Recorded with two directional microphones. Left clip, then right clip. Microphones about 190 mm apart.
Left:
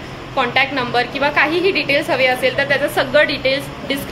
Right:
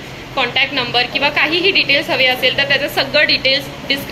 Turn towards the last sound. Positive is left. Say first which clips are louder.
# right 3 dB
turn(degrees=20)  # may be behind; listen again after turning